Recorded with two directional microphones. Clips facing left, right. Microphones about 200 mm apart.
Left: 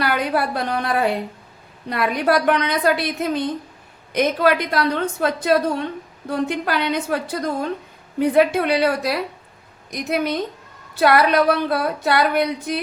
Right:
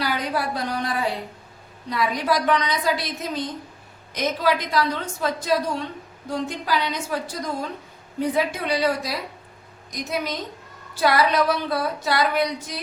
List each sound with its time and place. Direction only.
0.0 s a woman's voice: 60° left (ahead or behind)